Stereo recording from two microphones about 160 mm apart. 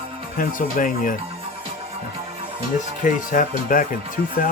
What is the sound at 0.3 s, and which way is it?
Speech, 60° left (ahead or behind).